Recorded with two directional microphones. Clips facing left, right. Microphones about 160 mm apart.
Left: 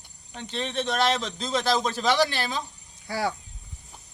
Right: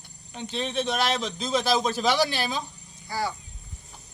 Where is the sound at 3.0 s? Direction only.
65° left (ahead or behind).